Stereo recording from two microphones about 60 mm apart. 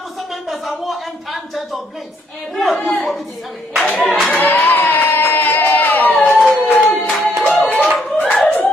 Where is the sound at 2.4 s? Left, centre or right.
Centre.